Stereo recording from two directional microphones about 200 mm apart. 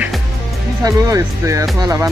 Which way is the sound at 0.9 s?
15° right (ahead or behind).